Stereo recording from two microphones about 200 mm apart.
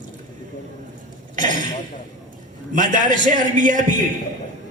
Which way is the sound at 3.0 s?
40° right (ahead or behind).